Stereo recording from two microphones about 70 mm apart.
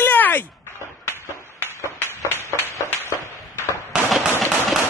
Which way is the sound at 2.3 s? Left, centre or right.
Left.